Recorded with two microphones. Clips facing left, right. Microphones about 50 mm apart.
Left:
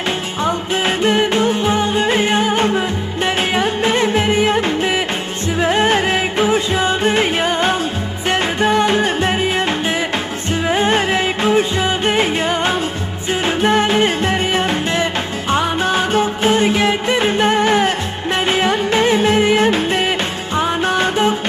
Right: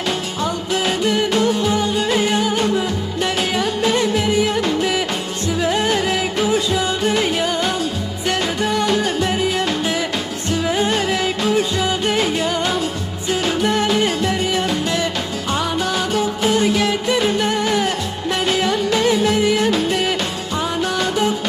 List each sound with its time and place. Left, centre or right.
0.4 s music: left